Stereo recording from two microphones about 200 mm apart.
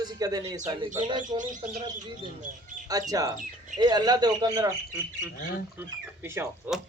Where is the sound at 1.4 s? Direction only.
40° right (ahead or behind).